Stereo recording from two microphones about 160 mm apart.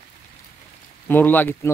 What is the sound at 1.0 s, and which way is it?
Speech, 10° left (ahead or behind).